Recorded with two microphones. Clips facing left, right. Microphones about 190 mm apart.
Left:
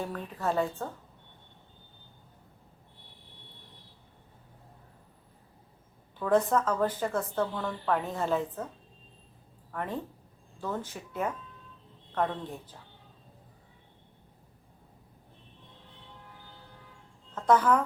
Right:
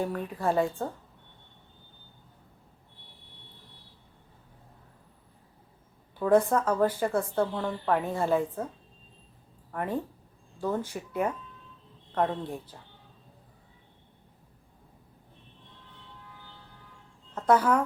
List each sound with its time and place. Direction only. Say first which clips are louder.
0.0 s a woman's voice: right 4 dB; 15° right (ahead or behind)
6.1 s a woman's voice: right 3 dB; 10° right (ahead or behind)
9.7 s a woman's voice: right 4 dB; 10° right (ahead or behind)
17.3 s speech: right 1 dB; 10° right (ahead or behind)